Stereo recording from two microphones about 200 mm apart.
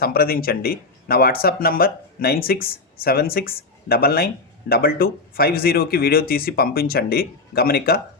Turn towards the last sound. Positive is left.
turn(degrees=50)  # may be behind; listen again after turning